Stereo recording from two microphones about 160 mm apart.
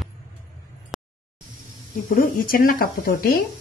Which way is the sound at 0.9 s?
Centre (ahead or behind).